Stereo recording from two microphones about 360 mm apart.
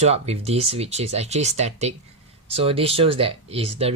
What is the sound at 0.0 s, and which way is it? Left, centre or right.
Speech, centre.